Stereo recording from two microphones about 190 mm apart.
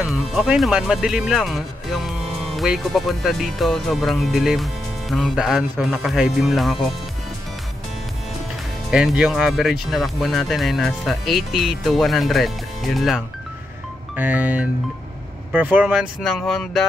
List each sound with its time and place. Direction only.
0.0 s speech: centre (ahead or behind)
8.9 s speech: 5° right (ahead or behind)
14.1 s music: 10° right (ahead or behind)
15.5 s speech: 10° right (ahead or behind)